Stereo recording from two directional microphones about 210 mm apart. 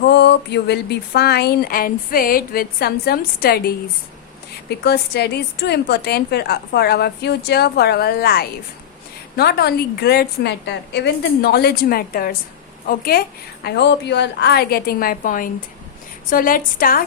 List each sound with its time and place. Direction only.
0.1 s a woman's voice: 55° left (ahead or behind)
4.8 s a woman's voice: 50° left (ahead or behind)